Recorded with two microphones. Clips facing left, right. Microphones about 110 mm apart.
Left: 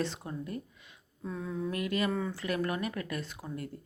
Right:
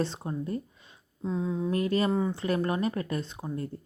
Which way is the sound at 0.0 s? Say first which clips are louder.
Right 4 dB; 30° right (ahead or behind).